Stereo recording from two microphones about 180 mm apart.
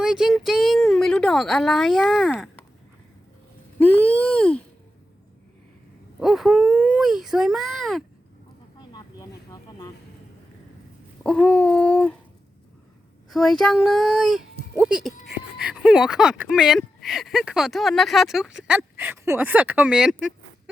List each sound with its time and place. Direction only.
0.0 s a sound: 5° right (ahead or behind)
3.8 s a sound: 10° left (ahead or behind)
6.1 s speech: centre (ahead or behind)
8.9 s vehicle: 20° left (ahead or behind)
11.2 s speech: 5° left (ahead or behind)
13.3 s speech: 5° left (ahead or behind)